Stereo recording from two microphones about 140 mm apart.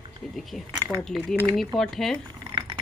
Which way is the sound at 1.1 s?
5° left (ahead or behind).